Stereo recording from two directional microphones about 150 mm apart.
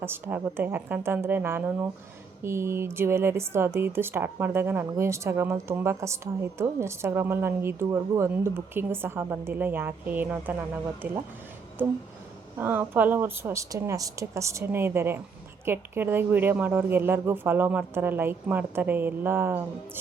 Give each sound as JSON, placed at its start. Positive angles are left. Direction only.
{"t": 0.0, "sound": "speech", "side_deg": -15}
{"t": 12.5, "sound": "speech", "side_deg": -15}